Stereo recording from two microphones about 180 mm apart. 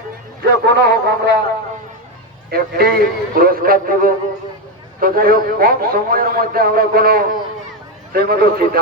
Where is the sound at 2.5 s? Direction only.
55° right (ahead or behind).